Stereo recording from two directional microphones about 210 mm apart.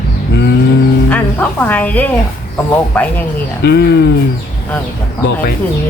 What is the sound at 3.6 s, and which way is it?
Speech, 50° left (ahead or behind).